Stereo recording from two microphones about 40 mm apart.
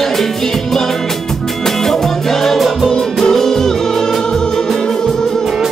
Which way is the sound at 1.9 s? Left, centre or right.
Centre.